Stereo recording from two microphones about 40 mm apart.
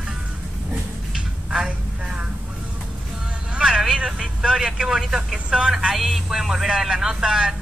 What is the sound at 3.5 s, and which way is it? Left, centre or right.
Vehicle, centre.